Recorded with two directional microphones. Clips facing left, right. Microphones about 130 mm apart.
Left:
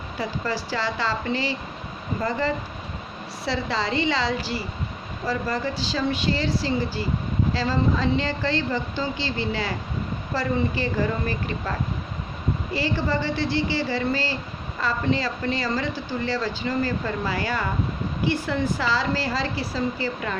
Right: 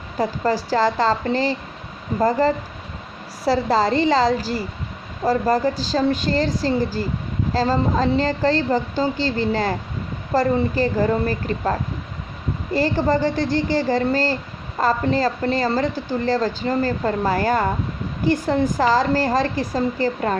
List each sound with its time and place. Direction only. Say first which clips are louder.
0.2 s a woman's voice: right 7 dB; 40° right (ahead or behind)